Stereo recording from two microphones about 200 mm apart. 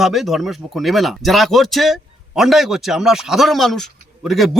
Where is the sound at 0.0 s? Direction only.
Centre (ahead or behind).